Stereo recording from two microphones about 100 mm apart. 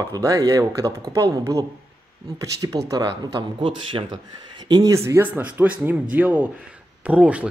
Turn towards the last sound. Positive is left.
turn(degrees=-15)  # may be behind; listen again after turning